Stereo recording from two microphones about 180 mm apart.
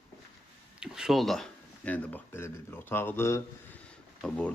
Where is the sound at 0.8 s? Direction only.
Centre (ahead or behind).